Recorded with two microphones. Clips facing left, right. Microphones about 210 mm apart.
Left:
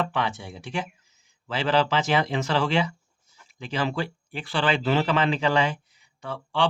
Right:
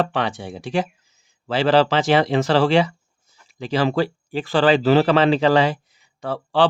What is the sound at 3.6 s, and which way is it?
Speech, 35° right (ahead or behind).